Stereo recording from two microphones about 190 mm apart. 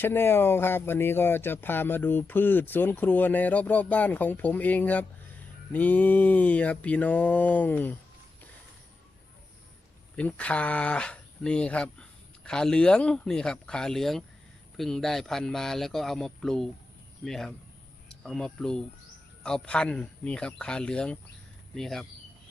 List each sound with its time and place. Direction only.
0.0 s speech: 10° left (ahead or behind)
10.2 s speech: 5° left (ahead or behind)